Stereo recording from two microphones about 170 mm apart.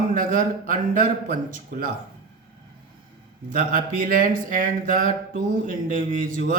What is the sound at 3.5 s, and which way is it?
Speech, 55° right (ahead or behind).